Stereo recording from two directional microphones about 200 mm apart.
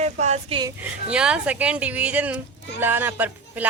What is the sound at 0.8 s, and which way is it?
Speech, 5° right (ahead or behind).